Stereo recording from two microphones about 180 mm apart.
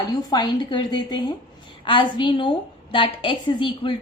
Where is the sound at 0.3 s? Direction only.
25° left (ahead or behind).